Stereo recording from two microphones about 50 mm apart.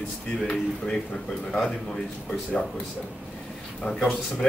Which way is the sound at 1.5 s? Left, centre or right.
Centre.